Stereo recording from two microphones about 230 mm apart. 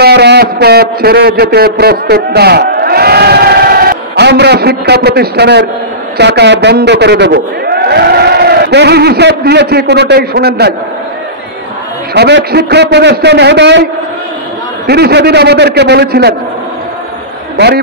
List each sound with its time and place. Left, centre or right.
0.0 s a man's voice: right
12.1 s a man's voice: right
14.9 s a man's voice: right